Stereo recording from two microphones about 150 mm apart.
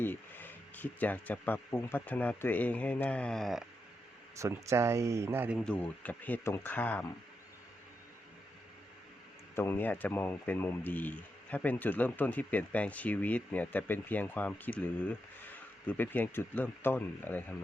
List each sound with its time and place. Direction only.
0.0 s speech: 15° left (ahead or behind)
4.4 s speech: 20° right (ahead or behind)
5.5 s speech: 5° left (ahead or behind)
9.6 s speech: 15° left (ahead or behind)